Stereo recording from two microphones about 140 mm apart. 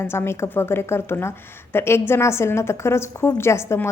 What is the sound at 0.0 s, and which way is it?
A woman's voice, 15° left (ahead or behind).